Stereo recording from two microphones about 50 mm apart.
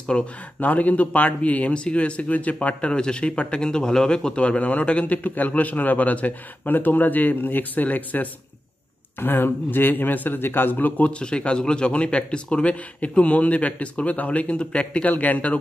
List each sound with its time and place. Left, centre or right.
0.1 s speech: left
2.9 s a man's voice: centre; by 11.1 s left
11.1 s speech: left
15.0 s a man's voice: left